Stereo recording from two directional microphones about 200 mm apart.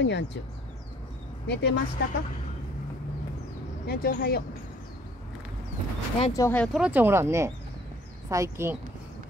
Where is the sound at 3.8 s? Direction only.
50° left (ahead or behind).